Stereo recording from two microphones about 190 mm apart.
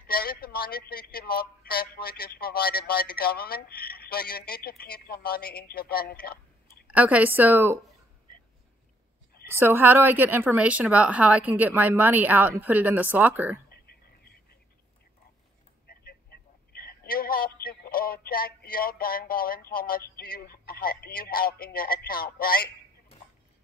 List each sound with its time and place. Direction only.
0.0 s speech: 50° left (ahead or behind)
6.2 s a sound: 55° left (ahead or behind)
6.9 s a woman's voice: 10° right (ahead or behind)
9.6 s a woman's voice: 10° right (ahead or behind)
13.7 s a sound: 55° left (ahead or behind)
15.9 s a man's voice: 55° left (ahead or behind)